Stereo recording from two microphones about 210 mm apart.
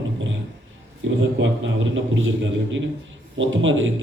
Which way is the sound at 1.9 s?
65° right (ahead or behind).